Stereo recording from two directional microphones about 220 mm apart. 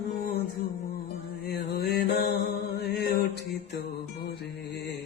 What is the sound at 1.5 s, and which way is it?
Mantra, 45° left (ahead or behind).